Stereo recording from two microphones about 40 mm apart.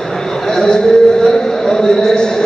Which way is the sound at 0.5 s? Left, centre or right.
Centre.